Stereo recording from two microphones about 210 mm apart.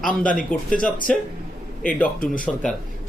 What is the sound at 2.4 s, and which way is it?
Speech, 5° left (ahead or behind).